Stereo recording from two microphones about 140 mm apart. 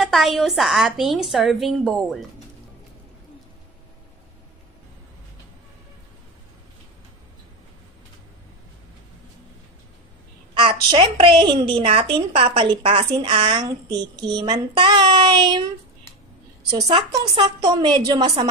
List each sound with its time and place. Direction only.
0.0 s a woman's voice: centre (ahead or behind)
10.5 s a child's voice: 35° right (ahead or behind)
17.1 s a woman's voice: 30° right (ahead or behind)